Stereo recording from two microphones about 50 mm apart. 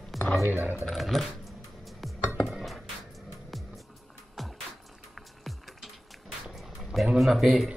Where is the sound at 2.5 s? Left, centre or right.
Centre.